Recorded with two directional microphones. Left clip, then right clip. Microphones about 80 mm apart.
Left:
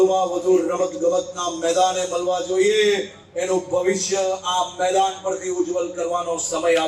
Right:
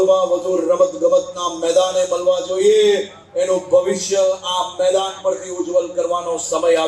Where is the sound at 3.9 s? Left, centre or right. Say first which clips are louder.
Right 5 dB; right.